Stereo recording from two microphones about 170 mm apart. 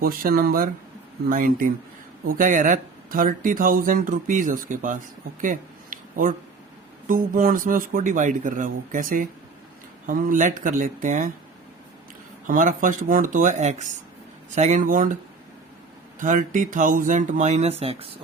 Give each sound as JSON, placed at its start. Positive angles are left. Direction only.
{"t": 0.0, "sound": "speech", "side_deg": -60}
{"t": 5.4, "sound": "a sound", "side_deg": -50}
{"t": 7.1, "sound": "speech", "side_deg": -55}
{"t": 12.5, "sound": "speech", "side_deg": -55}